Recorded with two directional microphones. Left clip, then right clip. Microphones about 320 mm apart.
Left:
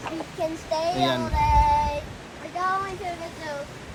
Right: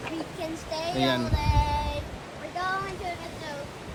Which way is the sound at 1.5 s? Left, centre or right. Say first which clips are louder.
Left 9 dB; centre.